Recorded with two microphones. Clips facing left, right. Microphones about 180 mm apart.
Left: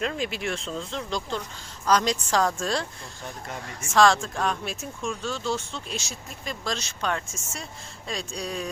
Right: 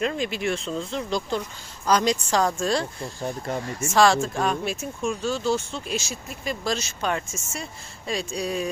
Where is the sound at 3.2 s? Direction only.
35° right (ahead or behind).